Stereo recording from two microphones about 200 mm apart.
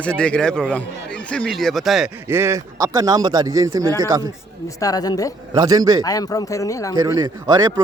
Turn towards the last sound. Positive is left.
turn(degrees=-20)  # may be behind; listen again after turning